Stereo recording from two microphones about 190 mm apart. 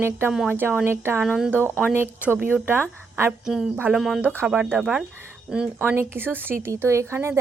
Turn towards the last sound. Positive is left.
turn(degrees=-15)  # may be behind; listen again after turning